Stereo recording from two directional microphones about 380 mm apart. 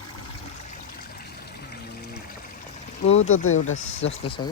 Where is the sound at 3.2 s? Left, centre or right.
Left.